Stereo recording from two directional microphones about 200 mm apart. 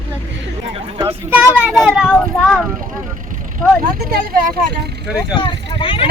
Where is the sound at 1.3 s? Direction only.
5° right (ahead or behind).